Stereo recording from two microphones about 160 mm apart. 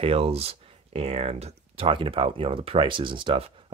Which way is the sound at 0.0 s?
40° right (ahead or behind).